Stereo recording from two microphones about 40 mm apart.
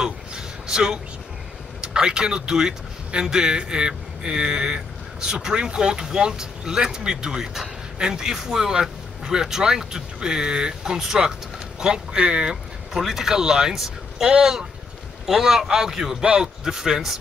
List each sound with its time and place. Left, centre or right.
0.0 s a sound: centre
1.8 s a man's voice: right
12.9 s speech: centre
13.7 s vehicle: centre
14.2 s a man's voice: centre